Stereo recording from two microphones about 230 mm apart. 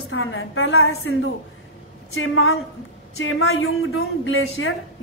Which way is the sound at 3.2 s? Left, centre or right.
Left.